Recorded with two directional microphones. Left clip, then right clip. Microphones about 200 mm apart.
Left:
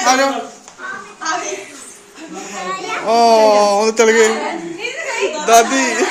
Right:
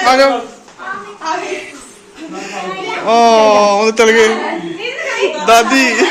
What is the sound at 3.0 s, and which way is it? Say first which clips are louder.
Speech: right 2 dB; 15° left (ahead or behind).